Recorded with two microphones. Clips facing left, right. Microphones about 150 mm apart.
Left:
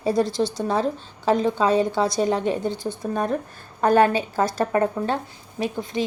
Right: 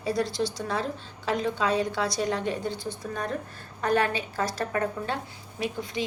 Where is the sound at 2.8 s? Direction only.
50° left (ahead or behind).